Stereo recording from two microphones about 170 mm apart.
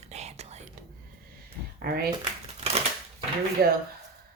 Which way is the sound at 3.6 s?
60° right (ahead or behind).